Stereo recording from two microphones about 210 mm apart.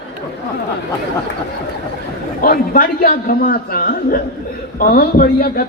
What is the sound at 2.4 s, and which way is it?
A woman's voice, 40° left (ahead or behind).